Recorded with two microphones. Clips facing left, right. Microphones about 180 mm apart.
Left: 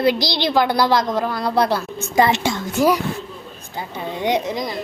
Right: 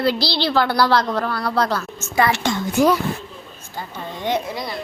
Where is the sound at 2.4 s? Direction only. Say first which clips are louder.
Right 1 dB; 5° left (ahead or behind).